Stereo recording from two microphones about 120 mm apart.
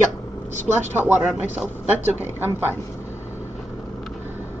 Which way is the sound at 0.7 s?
Centre (ahead or behind).